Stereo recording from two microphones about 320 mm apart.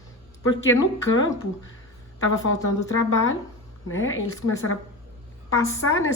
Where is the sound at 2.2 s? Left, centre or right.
Left.